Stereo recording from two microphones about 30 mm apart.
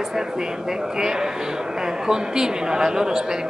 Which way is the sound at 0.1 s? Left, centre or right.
Centre.